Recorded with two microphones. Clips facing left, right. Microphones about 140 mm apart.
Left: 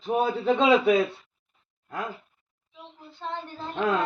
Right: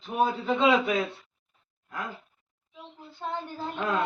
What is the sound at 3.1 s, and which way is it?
Speech, 10° right (ahead or behind).